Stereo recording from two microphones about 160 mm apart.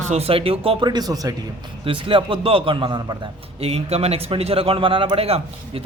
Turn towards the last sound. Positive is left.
turn(degrees=-40)  # may be behind; listen again after turning